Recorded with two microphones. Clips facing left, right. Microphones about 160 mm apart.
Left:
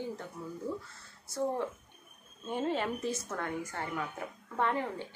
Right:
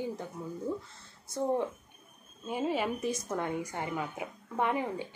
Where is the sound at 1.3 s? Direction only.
20° right (ahead or behind).